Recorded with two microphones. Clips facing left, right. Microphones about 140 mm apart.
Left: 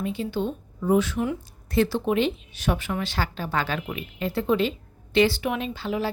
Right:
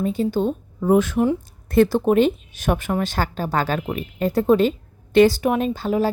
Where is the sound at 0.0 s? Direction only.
40° right (ahead or behind).